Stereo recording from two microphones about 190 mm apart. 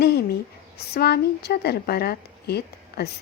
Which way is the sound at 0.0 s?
55° left (ahead or behind).